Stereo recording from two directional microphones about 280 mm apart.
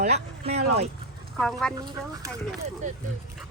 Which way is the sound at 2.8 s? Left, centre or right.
Right.